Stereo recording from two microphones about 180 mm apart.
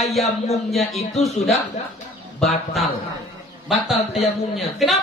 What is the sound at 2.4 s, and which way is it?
Speech, centre (ahead or behind).